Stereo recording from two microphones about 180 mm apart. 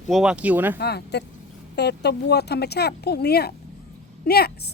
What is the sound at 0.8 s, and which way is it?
A woman's voice, 65° left (ahead or behind).